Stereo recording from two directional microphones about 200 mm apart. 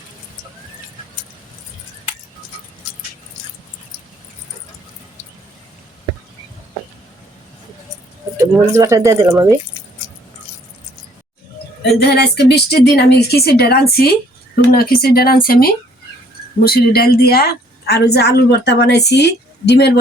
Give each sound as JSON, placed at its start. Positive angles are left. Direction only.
{"t": 8.4, "sound": "speech", "side_deg": -15}
{"t": 11.8, "sound": "a woman's voice", "side_deg": 55}